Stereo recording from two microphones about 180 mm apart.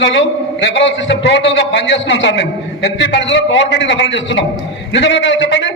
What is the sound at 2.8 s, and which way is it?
A man's voice, 75° left (ahead or behind).